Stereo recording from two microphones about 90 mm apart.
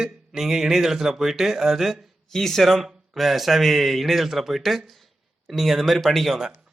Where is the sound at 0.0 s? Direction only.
5° right (ahead or behind).